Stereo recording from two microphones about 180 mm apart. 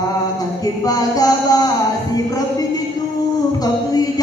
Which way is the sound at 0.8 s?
20° left (ahead or behind).